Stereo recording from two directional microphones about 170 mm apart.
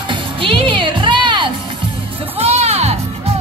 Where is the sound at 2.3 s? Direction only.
40° right (ahead or behind).